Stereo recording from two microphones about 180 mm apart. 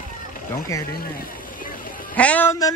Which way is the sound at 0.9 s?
50° left (ahead or behind).